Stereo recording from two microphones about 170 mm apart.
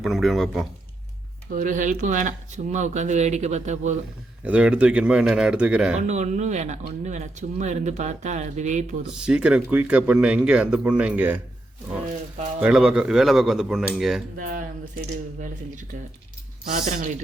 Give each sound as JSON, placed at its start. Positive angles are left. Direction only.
{"t": 0.0, "sound": "speech", "side_deg": 0}
{"t": 1.5, "sound": "speech", "side_deg": -50}
{"t": 4.4, "sound": "speech", "side_deg": -5}
{"t": 6.0, "sound": "speech", "side_deg": -45}
{"t": 9.1, "sound": "speech", "side_deg": -5}
{"t": 12.5, "sound": "speech", "side_deg": -5}
{"t": 14.3, "sound": "speech", "side_deg": -55}
{"t": 16.9, "sound": "speech", "side_deg": -45}